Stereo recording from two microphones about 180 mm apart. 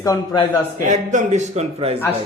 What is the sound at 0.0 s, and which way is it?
Speech, 20° left (ahead or behind).